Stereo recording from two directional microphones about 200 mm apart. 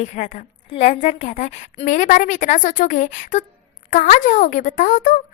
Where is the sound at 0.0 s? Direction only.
35° left (ahead or behind).